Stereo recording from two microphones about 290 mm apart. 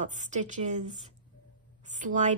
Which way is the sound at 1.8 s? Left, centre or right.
Right.